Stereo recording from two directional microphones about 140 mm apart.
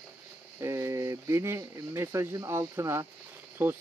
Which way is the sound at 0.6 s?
20° right (ahead or behind).